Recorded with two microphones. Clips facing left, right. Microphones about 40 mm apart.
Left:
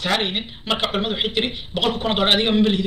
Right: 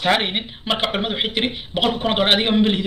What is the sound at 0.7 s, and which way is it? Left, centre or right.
A man's voice, centre.